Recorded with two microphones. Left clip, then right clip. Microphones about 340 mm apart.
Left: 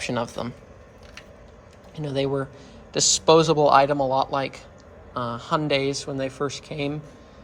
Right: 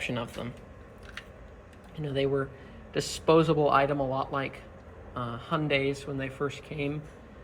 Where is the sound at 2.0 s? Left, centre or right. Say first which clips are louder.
Left 3 dB; centre.